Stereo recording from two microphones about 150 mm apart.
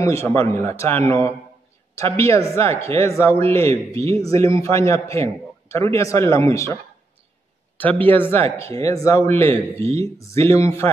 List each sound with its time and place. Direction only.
0.0 s a man's voice: 20° left (ahead or behind)